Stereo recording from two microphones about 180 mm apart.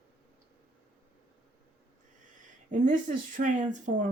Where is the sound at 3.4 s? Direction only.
45° right (ahead or behind).